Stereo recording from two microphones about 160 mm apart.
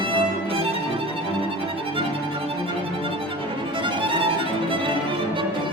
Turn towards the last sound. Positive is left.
turn(degrees=-35)  # may be behind; listen again after turning